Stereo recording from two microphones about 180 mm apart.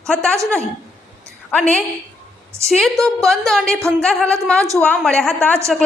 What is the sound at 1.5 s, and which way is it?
A woman's voice, 5° left (ahead or behind).